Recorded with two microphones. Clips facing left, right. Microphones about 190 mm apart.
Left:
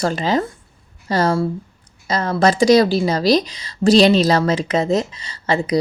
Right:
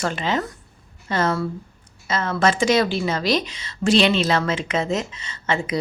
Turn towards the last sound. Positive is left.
turn(degrees=35)  # may be behind; listen again after turning